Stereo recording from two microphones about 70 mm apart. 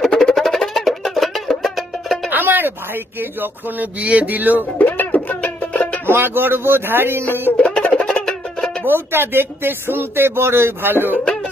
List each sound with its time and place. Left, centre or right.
0.1 s music: centre
2.3 s music: right
3.2 s speech: right
4.7 s music: left
6.0 s speech: right
7.5 s music: centre
8.8 s speech: right